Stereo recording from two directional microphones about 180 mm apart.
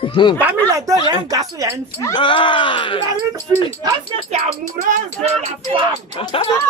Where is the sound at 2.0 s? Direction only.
25° left (ahead or behind).